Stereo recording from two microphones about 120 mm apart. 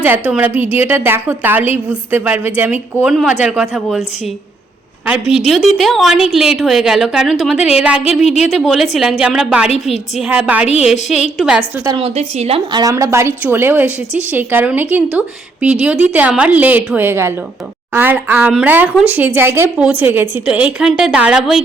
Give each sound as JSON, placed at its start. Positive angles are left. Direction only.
{"t": 0.0, "sound": "a woman's voice", "side_deg": -15}
{"t": 5.5, "sound": "a woman's voice", "side_deg": 0}
{"t": 12.0, "sound": "a woman's voice", "side_deg": -60}
{"t": 12.7, "sound": "a woman's voice", "side_deg": -30}